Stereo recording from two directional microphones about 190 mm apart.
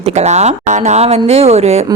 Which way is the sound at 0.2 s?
35° right (ahead or behind).